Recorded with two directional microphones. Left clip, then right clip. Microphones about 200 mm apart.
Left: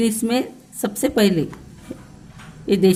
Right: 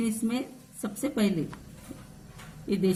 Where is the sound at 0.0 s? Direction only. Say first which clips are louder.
Left 11 dB; 45° left (ahead or behind).